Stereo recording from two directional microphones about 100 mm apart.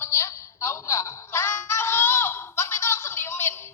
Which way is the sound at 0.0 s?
25° left (ahead or behind).